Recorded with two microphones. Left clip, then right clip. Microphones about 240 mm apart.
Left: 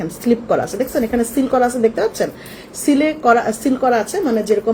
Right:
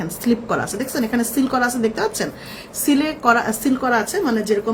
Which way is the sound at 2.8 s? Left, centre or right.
Centre.